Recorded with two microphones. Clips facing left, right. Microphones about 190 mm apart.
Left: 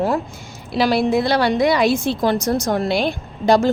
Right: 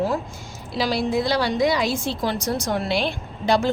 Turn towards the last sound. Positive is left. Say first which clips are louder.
# left 5 dB
turn(degrees=45)  # may be behind; listen again after turning